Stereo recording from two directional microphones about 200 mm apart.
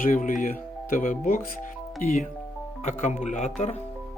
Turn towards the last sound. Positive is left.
turn(degrees=35)  # may be behind; listen again after turning